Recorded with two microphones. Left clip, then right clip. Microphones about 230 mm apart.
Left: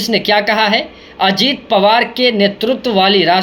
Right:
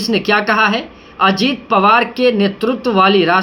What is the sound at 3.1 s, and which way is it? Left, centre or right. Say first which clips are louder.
Speech: left 1 dB; centre.